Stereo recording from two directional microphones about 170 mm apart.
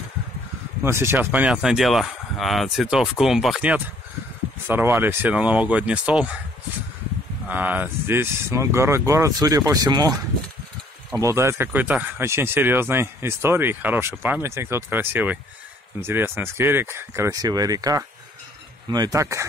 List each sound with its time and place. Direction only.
0.8 s speech: 15° right (ahead or behind)
7.4 s speech: 10° right (ahead or behind)